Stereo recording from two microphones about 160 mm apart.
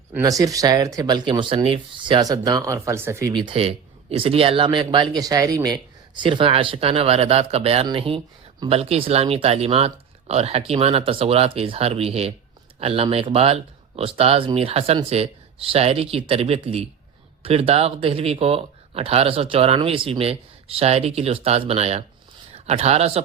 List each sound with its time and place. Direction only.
0.1 s speech: 20° right (ahead or behind)
3.3 s a man's voice: 35° right (ahead or behind)